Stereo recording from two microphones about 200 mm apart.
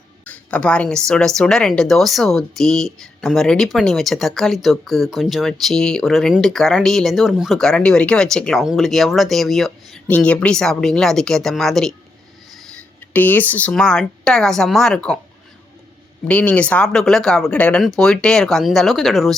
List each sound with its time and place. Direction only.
0.3 s speech: 5° left (ahead or behind)
16.2 s speech: 5° left (ahead or behind)